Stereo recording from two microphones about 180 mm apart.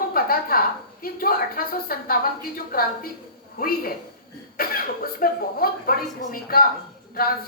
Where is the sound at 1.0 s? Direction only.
55° left (ahead or behind).